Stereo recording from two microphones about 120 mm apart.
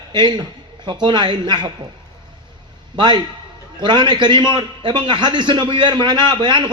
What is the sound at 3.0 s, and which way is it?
A man's voice, 35° right (ahead or behind).